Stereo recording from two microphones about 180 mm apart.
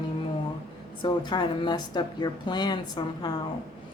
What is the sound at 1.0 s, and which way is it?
Speech, 25° left (ahead or behind).